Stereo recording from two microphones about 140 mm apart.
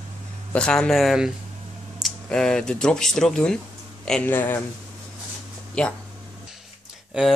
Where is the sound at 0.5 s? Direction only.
5° left (ahead or behind).